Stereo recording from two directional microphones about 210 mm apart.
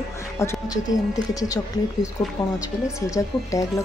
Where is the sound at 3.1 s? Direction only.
15° left (ahead or behind).